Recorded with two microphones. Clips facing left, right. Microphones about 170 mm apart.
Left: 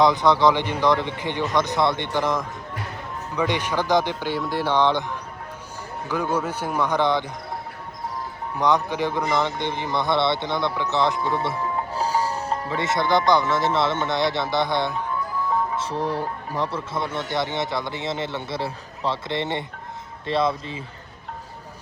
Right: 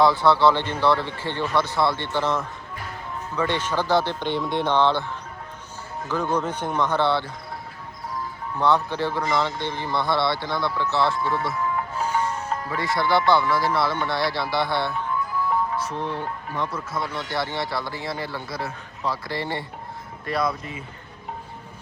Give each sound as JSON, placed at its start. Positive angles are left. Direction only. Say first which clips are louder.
{"t": 0.0, "sound": "a man's voice", "louder": "even", "side_deg": 20}
{"t": 8.5, "sound": "a man's voice", "louder": "even", "side_deg": 15}
{"t": 15.8, "sound": "speech", "louder": "left 3 dB", "side_deg": 35}